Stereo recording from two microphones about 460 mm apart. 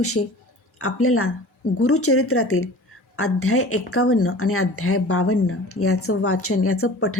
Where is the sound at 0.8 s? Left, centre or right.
Left.